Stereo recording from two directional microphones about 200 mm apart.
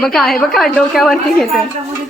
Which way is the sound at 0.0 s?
Centre (ahead or behind).